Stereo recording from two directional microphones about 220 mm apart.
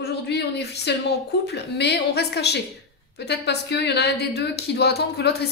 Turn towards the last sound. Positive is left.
turn(degrees=50)  # may be behind; listen again after turning